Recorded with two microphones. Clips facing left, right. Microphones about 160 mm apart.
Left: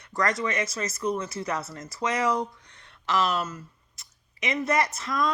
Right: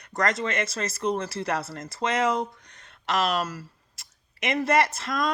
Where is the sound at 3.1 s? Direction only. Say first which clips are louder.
Even; 75° right (ahead or behind).